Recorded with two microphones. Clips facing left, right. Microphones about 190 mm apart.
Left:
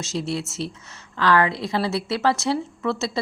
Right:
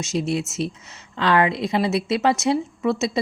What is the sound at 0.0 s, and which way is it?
Speech, 20° right (ahead or behind).